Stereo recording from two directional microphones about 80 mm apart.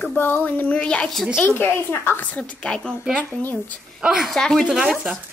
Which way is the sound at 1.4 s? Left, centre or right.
Left.